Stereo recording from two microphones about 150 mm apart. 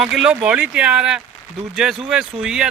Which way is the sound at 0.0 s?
5° right (ahead or behind).